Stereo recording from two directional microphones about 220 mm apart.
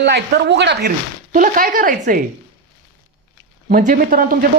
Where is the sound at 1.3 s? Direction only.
40° right (ahead or behind).